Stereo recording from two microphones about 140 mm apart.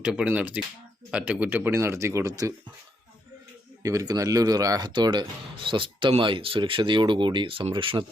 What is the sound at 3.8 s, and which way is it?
Speech, 25° right (ahead or behind).